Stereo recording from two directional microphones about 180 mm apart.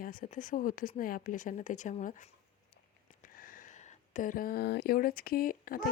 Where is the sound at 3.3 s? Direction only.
50° left (ahead or behind).